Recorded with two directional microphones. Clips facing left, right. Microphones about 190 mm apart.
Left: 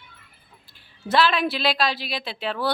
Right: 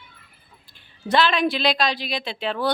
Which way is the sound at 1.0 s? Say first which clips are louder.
Right 1 dB; 5° left (ahead or behind).